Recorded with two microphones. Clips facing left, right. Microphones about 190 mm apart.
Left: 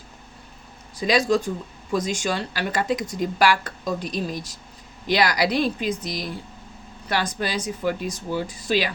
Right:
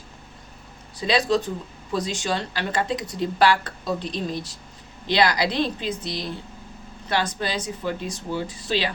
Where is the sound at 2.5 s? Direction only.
25° right (ahead or behind).